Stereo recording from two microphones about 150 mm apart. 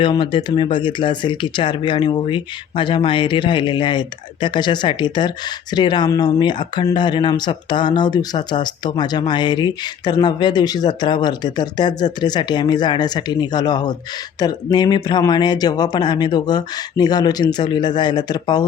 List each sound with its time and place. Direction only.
0.0 s speech: 35° left (ahead or behind)